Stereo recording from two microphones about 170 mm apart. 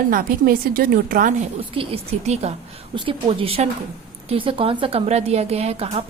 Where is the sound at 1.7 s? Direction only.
35° right (ahead or behind).